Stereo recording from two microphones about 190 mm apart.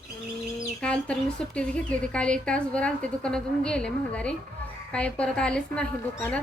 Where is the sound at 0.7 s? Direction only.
5° left (ahead or behind).